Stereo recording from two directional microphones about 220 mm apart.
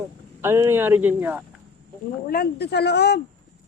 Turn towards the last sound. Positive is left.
turn(degrees=45)  # may be behind; listen again after turning